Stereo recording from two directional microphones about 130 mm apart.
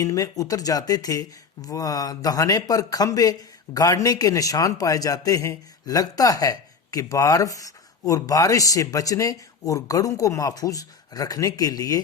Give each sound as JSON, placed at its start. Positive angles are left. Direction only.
{"t": 0.0, "sound": "a man's voice", "side_deg": 25}